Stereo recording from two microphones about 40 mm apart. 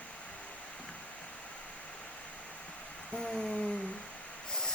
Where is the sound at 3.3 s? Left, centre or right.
Centre.